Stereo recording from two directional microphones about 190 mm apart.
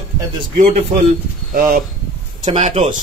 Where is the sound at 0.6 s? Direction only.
40° right (ahead or behind).